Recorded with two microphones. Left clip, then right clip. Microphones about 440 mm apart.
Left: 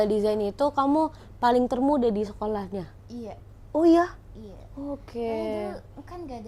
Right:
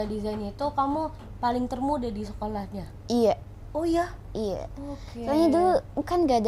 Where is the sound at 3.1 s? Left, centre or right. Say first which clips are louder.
Right 17 dB; right.